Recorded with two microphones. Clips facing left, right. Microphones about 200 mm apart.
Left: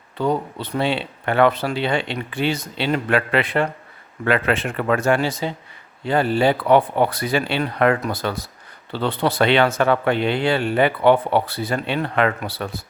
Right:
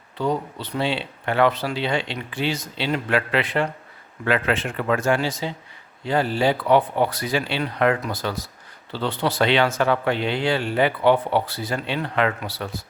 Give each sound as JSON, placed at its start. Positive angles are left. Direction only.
{"t": 0.2, "sound": "speech", "side_deg": 55}